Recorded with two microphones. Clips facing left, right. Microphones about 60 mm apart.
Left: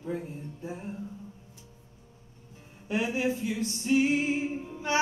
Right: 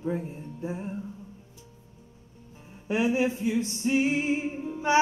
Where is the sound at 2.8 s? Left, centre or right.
Right.